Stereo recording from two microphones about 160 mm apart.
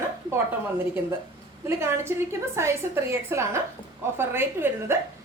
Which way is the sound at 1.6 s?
15° right (ahead or behind).